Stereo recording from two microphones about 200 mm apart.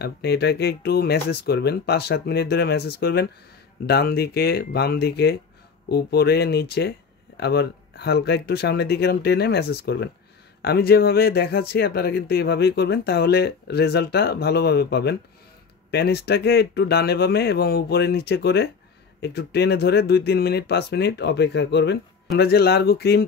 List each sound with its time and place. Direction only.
0.0 s speech: 55° left (ahead or behind)